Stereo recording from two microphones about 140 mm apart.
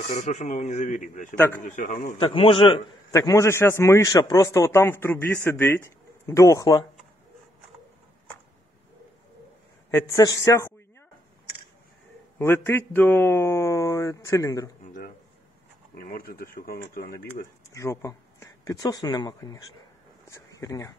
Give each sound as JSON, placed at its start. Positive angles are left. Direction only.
{"t": 0.0, "sound": "a man's voice", "side_deg": 60}
{"t": 1.3, "sound": "speech", "side_deg": 15}
{"t": 1.6, "sound": "a man's voice", "side_deg": 65}
{"t": 2.1, "sound": "a man's voice", "side_deg": 40}
{"t": 3.1, "sound": "a man's voice", "side_deg": 25}
{"t": 9.8, "sound": "a man's voice", "side_deg": 20}
{"t": 12.4, "sound": "a man's voice", "side_deg": 15}
{"t": 16.0, "sound": "speech", "side_deg": 90}
{"t": 17.6, "sound": "speech", "side_deg": 20}